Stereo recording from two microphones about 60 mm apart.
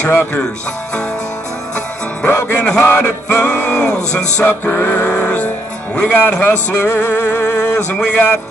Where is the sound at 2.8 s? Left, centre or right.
Left.